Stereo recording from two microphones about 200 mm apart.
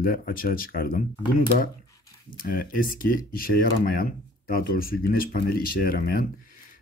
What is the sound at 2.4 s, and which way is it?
Speech, 45° left (ahead or behind).